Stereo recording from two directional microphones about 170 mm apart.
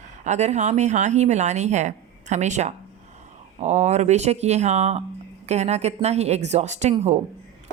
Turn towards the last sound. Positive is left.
turn(degrees=-40)  # may be behind; listen again after turning